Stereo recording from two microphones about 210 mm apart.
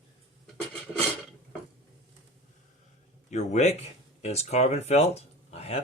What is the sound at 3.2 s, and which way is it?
Speech, 35° left (ahead or behind).